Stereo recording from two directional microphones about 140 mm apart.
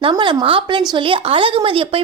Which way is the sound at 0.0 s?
35° right (ahead or behind).